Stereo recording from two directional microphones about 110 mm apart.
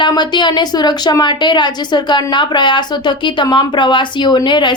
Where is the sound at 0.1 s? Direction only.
40° left (ahead or behind).